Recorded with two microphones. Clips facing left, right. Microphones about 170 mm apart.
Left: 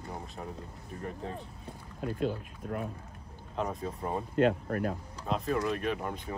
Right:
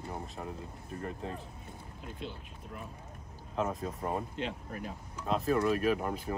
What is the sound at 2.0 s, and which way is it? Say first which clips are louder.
Speech: left 12 dB; 50° left (ahead or behind).